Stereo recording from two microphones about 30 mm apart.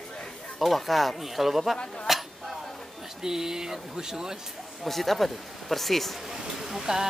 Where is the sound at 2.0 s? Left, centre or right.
Centre.